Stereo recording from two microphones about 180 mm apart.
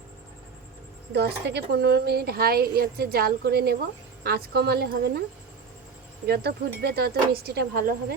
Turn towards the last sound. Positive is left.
turn(degrees=-60)  # may be behind; listen again after turning